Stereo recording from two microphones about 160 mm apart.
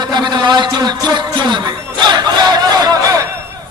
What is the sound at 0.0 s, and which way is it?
A man's voice, 25° right (ahead or behind).